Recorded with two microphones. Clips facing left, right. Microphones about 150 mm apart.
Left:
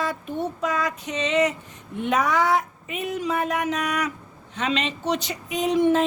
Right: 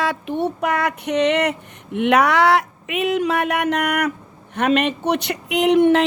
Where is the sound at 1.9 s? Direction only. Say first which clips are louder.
Right 6 dB; 75° right (ahead or behind).